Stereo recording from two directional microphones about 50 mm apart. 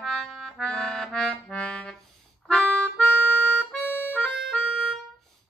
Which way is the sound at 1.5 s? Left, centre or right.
Left.